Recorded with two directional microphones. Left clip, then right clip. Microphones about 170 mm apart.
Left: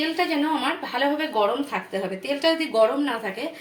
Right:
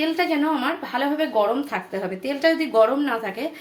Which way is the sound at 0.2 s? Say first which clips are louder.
Right 1 dB; 15° right (ahead or behind).